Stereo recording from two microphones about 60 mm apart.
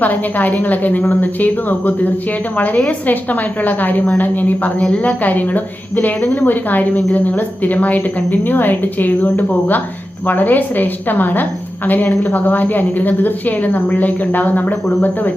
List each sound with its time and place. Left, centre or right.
0.0 s a woman's voice: left